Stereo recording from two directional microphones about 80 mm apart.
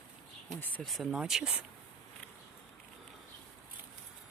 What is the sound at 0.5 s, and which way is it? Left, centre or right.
Speech, left.